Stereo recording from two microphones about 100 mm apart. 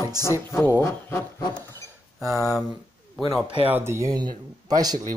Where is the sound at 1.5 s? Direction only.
20° left (ahead or behind).